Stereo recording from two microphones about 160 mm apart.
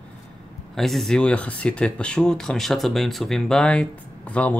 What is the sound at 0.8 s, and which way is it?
Speech, centre (ahead or behind).